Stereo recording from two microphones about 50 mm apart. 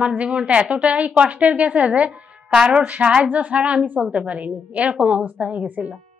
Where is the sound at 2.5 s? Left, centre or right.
Centre.